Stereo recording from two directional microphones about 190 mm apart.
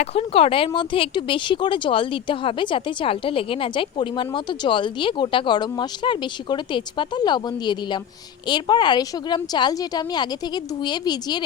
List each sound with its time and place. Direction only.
0.0 s speech: 30° left (ahead or behind)